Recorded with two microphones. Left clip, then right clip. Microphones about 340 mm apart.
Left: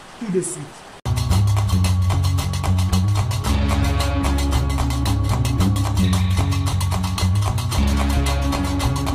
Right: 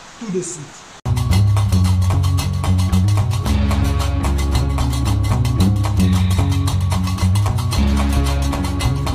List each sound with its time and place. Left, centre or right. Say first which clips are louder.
1.3 s music: right 3 dB; centre
3.4 s music: even; centre
7.7 s music: right 2 dB; centre